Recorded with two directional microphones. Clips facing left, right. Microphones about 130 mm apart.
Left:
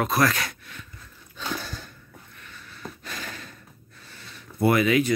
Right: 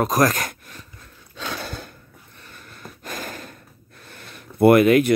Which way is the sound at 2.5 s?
50° right (ahead or behind).